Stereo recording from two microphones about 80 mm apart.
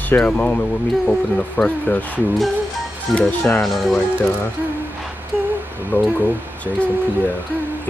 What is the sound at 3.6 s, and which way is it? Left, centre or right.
Music, centre.